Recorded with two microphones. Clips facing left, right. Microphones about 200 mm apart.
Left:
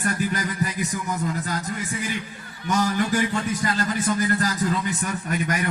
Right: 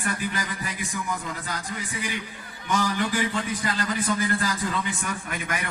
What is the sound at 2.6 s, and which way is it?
A man's voice, 45° left (ahead or behind).